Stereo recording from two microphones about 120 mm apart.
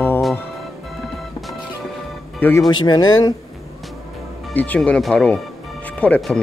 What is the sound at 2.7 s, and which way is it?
Speech, 35° left (ahead or behind).